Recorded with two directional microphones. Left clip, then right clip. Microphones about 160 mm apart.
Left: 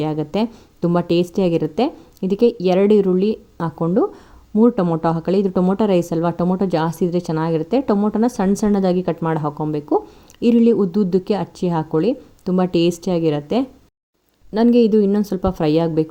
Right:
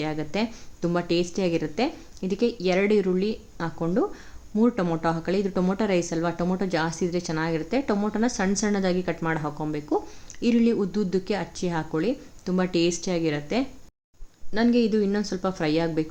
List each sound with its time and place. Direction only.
0.0 s a woman's voice: 50° left (ahead or behind)